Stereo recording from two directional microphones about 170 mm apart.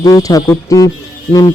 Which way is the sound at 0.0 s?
20° left (ahead or behind).